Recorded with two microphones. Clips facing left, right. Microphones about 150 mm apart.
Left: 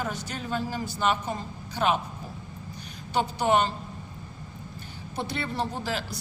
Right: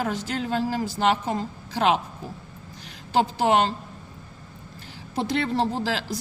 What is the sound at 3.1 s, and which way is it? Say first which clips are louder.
Speech: right 3 dB; 90° right.